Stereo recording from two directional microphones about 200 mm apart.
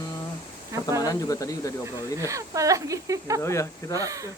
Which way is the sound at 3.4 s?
15° left (ahead or behind).